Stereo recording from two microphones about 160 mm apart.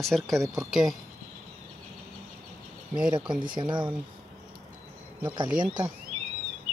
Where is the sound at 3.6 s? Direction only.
30° right (ahead or behind).